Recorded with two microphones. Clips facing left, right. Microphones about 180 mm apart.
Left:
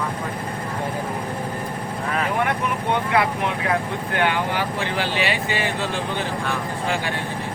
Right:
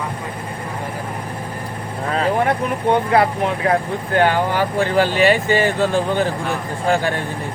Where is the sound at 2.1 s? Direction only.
30° right (ahead or behind).